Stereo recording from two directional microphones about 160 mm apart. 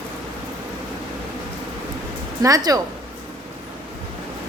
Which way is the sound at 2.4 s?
20° right (ahead or behind).